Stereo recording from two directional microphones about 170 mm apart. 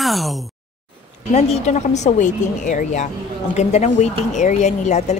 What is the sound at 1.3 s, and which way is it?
A woman's voice, 40° left (ahead or behind).